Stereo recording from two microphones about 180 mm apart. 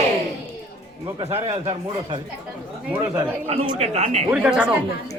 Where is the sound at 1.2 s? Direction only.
35° right (ahead or behind).